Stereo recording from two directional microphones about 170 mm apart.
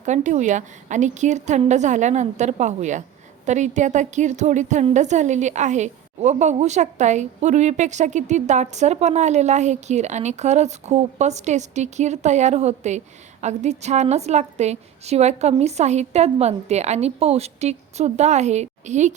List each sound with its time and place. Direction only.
0.0 s a woman's voice: 45° right (ahead or behind)